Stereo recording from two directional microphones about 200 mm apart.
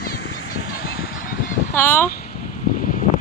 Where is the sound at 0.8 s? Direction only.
45° left (ahead or behind).